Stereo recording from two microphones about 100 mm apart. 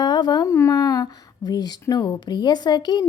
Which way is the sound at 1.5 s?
40° left (ahead or behind).